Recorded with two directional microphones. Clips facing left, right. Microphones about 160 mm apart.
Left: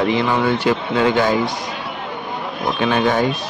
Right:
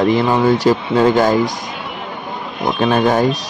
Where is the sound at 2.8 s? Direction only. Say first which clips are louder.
Right 3 dB; 40° right (ahead or behind).